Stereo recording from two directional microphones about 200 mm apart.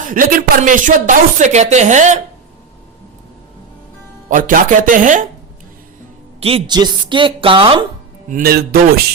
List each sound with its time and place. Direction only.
0.0 s speech: 45° right (ahead or behind)
4.3 s speech: 40° right (ahead or behind)
6.4 s a woman's voice: 25° right (ahead or behind)
8.3 s a man's voice: 45° right (ahead or behind)